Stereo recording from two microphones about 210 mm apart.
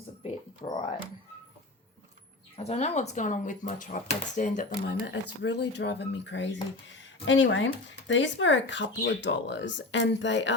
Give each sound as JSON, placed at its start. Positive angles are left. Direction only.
{"t": 0.2, "sound": "a sound", "side_deg": 30}
{"t": 2.6, "sound": "speech", "side_deg": 30}
{"t": 5.4, "sound": "speech", "side_deg": 55}